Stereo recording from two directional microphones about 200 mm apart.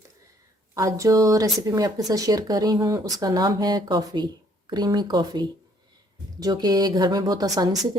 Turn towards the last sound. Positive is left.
turn(degrees=-20)  # may be behind; listen again after turning